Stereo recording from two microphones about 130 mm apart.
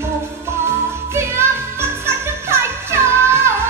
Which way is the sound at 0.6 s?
20° right (ahead or behind).